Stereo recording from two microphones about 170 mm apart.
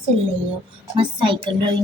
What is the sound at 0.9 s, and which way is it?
Speech, 30° right (ahead or behind).